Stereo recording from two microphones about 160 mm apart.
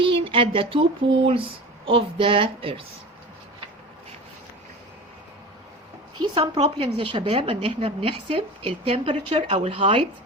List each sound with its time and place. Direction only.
0.0 s a sound: 35° right (ahead or behind)
1.3 s a woman's voice: 35° right (ahead or behind)
6.3 s a woman's voice: 30° right (ahead or behind)